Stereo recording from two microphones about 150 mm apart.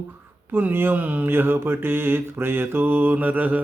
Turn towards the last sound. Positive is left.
turn(degrees=-10)  # may be behind; listen again after turning